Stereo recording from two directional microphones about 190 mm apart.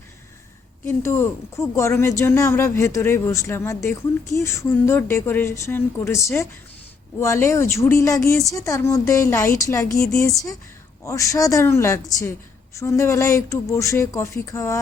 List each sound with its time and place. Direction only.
0.9 s speech: 15° left (ahead or behind)